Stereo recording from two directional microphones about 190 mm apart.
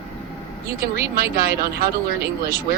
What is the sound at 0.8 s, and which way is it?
A woman's voice, 50° right (ahead or behind).